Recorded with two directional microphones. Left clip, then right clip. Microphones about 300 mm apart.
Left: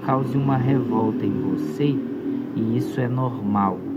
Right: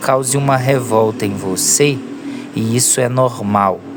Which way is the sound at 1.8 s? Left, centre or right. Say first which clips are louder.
Right 8 dB; right.